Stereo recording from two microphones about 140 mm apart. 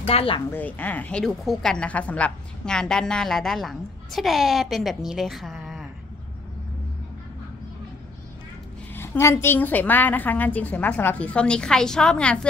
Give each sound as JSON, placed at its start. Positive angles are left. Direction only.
{"t": 0.0, "sound": "a woman's voice", "side_deg": 45}
{"t": 0.5, "sound": "a woman's voice", "side_deg": 10}
{"t": 8.9, "sound": "a woman's voice", "side_deg": 15}